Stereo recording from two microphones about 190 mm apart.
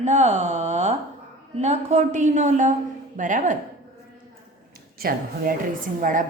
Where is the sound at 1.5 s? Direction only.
35° right (ahead or behind).